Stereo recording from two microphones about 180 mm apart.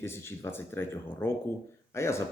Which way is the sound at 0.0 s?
15° left (ahead or behind).